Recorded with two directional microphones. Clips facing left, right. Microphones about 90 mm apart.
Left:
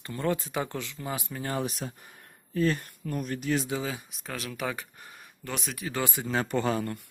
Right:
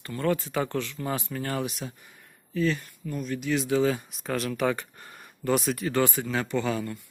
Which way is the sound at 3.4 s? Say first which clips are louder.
Right 1 dB; 40° left (ahead or behind).